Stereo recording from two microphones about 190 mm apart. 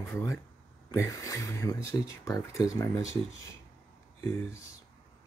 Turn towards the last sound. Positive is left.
turn(degrees=15)  # may be behind; listen again after turning